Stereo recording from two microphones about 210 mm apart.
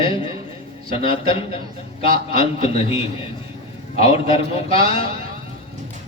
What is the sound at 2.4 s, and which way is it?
Speech, 30° left (ahead or behind).